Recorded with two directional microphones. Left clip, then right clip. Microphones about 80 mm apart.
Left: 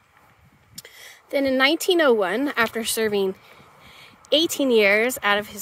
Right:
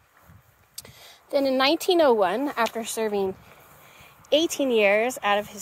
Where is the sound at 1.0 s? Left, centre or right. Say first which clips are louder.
Left 1 dB; left.